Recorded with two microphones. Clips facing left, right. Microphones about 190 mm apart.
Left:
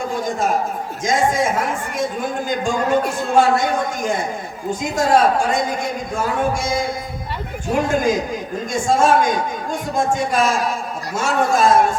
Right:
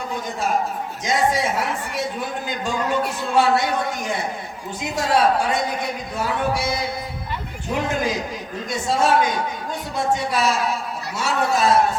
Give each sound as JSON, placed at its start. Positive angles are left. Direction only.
{"t": 1.0, "sound": "a woman's voice", "side_deg": 45}